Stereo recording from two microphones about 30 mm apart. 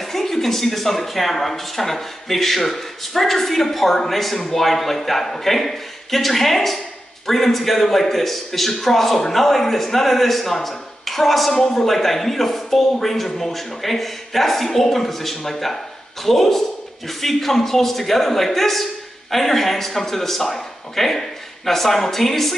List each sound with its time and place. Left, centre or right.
0.0 s a man's voice: centre
11.6 s speech: centre
11.9 s a man's voice: centre